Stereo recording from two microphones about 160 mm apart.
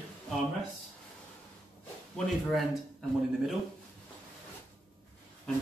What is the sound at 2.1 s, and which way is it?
Speech, centre (ahead or behind).